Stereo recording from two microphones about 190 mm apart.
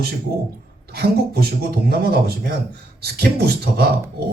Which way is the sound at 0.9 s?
55° right (ahead or behind).